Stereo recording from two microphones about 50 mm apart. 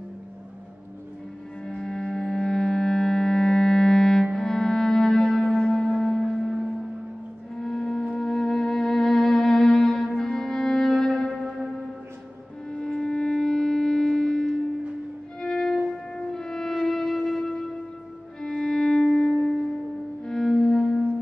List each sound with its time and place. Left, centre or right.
1.7 s music: centre
7.5 s music: centre
11.4 s music: centre
12.6 s wind instrument: centre
15.4 s violin: centre
16.3 s music: centre